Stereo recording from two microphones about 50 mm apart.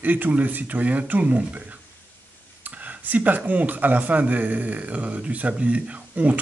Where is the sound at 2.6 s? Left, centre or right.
Right.